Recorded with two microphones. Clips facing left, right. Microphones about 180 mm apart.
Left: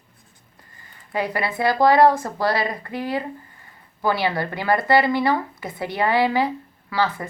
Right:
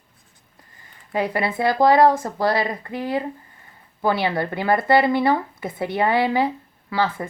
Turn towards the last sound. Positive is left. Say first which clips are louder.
# even
turn(degrees=-25)  # may be behind; listen again after turning